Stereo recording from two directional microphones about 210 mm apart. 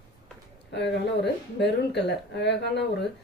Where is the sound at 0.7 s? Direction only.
55° left (ahead or behind).